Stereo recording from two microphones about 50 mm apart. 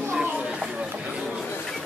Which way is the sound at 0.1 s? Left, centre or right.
Centre.